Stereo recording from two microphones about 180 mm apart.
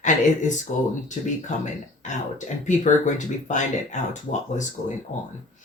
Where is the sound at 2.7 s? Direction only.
45° left (ahead or behind).